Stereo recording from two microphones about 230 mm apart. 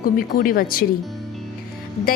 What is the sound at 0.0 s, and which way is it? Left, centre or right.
Speech, left.